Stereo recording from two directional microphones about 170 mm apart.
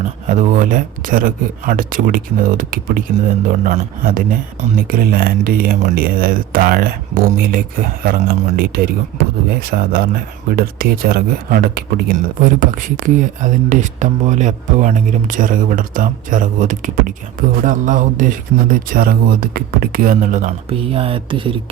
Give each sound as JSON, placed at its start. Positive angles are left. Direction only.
{"t": 0.5, "sound": "speech", "side_deg": -50}
{"t": 20.7, "sound": "speech", "side_deg": -35}